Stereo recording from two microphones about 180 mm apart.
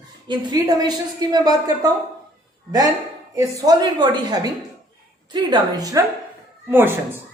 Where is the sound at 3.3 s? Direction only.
20° right (ahead or behind).